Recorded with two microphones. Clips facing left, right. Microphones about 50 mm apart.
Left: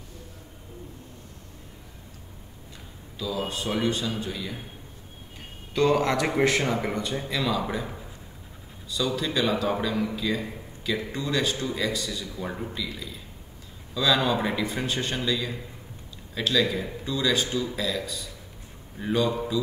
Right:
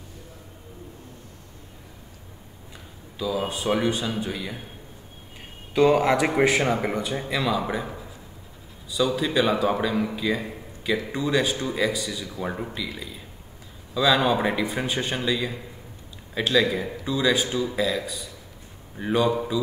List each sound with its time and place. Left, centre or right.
3.2 s speech: centre
5.8 s speech: centre
13.9 s speech: centre